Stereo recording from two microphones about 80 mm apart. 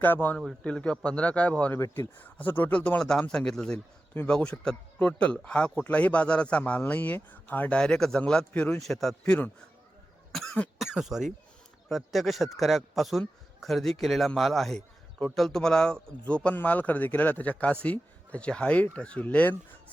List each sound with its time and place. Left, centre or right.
0.0 s a man's voice: left
8.8 s a man's voice: centre
9.2 s a man's voice: centre
10.3 s cough: centre
10.8 s a man's voice: centre